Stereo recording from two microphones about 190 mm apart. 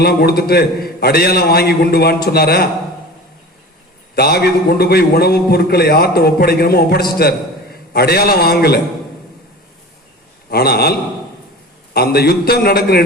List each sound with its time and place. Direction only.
0.0 s a man's voice: 55° left (ahead or behind)
4.1 s a man's voice: 55° left (ahead or behind)
10.5 s a man's voice: 55° left (ahead or behind)
11.9 s a man's voice: 55° left (ahead or behind)